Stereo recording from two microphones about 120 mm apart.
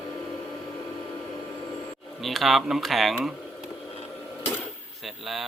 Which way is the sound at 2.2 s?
Centre (ahead or behind).